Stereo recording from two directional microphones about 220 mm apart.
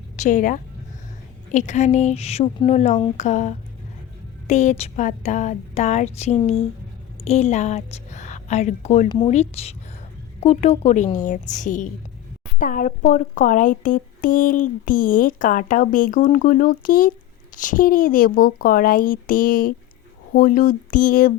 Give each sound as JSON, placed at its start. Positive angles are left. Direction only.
{"t": 0.2, "sound": "a woman's voice", "side_deg": 35}